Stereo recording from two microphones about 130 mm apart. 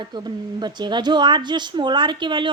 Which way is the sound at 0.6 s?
35° right (ahead or behind).